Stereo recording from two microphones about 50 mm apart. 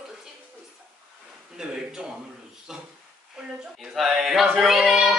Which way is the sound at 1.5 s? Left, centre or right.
Centre.